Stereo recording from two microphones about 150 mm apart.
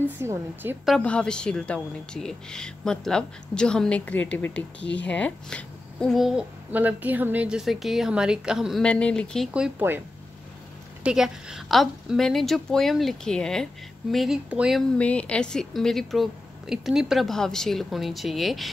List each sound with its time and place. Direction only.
0.0 s a woman's voice: 15° right (ahead or behind)
0.8 s speech: 5° left (ahead or behind)
8.8 s speech: 5° left (ahead or behind)
9.5 s a woman's voice: 10° right (ahead or behind)
11.1 s speech: 5° right (ahead or behind)